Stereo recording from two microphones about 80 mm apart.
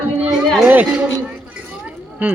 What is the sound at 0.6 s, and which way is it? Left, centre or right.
Speech, right.